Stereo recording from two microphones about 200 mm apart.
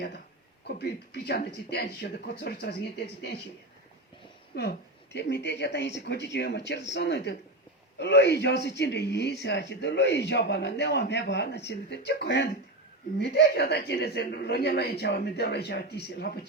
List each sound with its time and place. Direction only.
0.8 s speech: 55° left (ahead or behind)
4.5 s a woman's voice: 55° left (ahead or behind)